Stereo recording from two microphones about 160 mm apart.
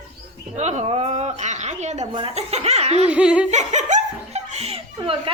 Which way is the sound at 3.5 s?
45° right (ahead or behind).